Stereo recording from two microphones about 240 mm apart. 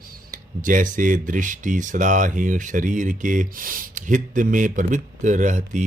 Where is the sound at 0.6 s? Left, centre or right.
Right.